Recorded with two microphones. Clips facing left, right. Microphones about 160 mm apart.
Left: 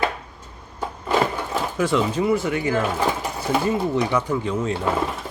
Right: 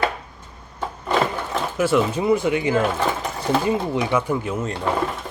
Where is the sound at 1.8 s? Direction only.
10° right (ahead or behind).